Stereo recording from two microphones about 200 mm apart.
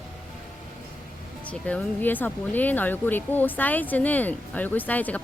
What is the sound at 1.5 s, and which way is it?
A woman's voice, 5° left (ahead or behind).